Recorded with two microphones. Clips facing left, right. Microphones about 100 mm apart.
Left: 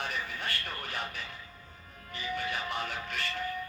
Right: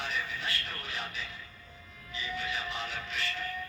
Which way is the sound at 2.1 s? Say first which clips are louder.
Left 2 dB; 50° left (ahead or behind).